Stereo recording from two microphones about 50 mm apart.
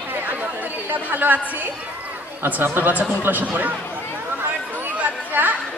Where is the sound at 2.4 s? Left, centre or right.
Right.